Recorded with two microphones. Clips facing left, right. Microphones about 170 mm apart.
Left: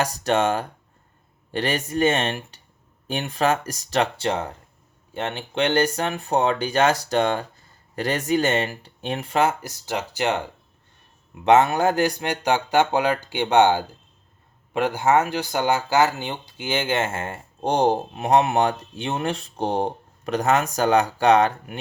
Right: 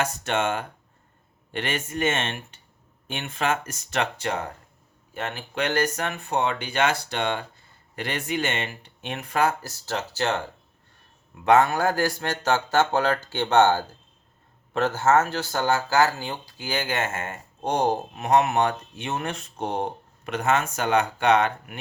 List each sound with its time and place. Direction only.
0.0 s speech: 35° left (ahead or behind)